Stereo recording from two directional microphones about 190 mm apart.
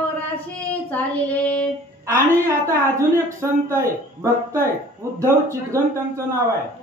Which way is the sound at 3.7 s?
15° right (ahead or behind).